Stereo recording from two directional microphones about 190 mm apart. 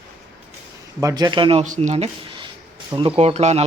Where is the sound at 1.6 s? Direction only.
40° right (ahead or behind).